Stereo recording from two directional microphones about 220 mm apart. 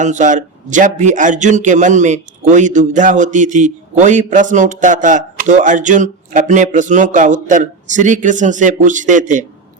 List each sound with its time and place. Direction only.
0.0 s a man's voice: 35° right (ahead or behind)